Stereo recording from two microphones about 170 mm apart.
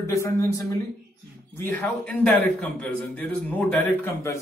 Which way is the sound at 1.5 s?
10° left (ahead or behind).